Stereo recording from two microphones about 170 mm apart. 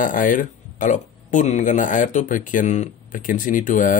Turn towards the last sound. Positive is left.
turn(degrees=50)  # may be behind; listen again after turning